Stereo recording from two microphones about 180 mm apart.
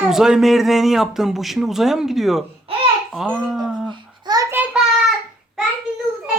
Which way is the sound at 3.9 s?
25° right (ahead or behind).